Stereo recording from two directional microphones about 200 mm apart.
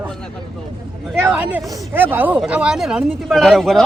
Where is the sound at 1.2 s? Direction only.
10° right (ahead or behind).